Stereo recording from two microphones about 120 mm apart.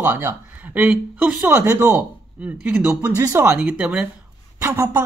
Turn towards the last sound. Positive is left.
turn(degrees=-20)  # may be behind; listen again after turning